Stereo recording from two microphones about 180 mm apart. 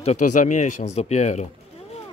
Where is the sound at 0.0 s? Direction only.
40° left (ahead or behind).